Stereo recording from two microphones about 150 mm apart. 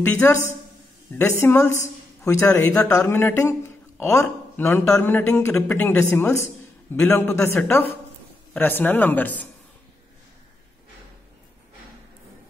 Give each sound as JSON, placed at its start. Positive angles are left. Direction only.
{"t": 0.0, "sound": "a man's voice", "side_deg": 15}
{"t": 1.4, "sound": "a man's voice", "side_deg": 15}